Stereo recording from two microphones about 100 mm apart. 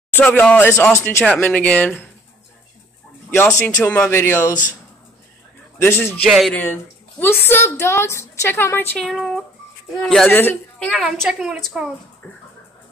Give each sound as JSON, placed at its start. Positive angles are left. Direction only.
{"t": 0.1, "sound": "a woman's voice", "side_deg": 15}
{"t": 1.2, "sound": "speech", "side_deg": 15}
{"t": 3.3, "sound": "a woman's voice", "side_deg": 20}
{"t": 5.8, "sound": "a woman's voice", "side_deg": 25}
{"t": 6.2, "sound": "speech", "side_deg": 0}
{"t": 6.5, "sound": "a woman's voice", "side_deg": 20}
{"t": 8.9, "sound": "speech", "side_deg": 0}
{"t": 10.3, "sound": "a woman's voice", "side_deg": 20}
{"t": 10.9, "sound": "a woman's voice", "side_deg": -5}